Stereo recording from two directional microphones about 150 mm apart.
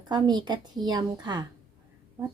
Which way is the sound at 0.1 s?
30° right (ahead or behind).